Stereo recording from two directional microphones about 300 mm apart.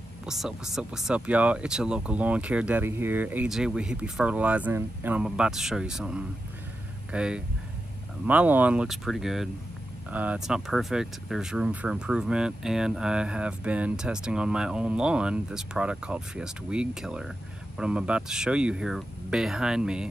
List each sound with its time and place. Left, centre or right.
0.3 s speech: centre